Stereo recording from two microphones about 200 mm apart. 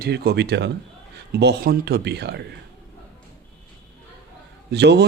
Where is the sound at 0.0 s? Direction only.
55° right (ahead or behind).